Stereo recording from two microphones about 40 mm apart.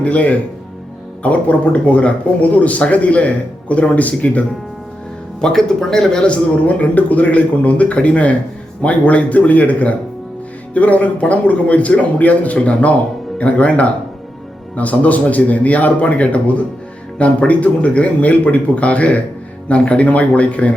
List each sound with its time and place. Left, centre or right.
0.0 s speech: left
5.4 s speech: centre
6.2 s speech: left